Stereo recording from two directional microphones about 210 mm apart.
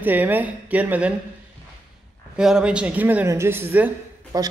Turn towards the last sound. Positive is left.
turn(degrees=-15)  # may be behind; listen again after turning